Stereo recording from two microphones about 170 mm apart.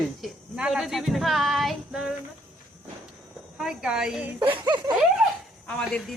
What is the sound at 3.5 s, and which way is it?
Speech, centre (ahead or behind).